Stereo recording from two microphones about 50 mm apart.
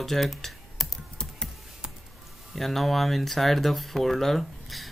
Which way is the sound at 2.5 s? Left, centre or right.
Centre.